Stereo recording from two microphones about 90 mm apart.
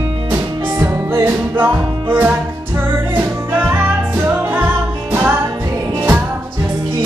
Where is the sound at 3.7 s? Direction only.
20° right (ahead or behind).